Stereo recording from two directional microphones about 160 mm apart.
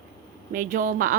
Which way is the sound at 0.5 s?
55° right (ahead or behind).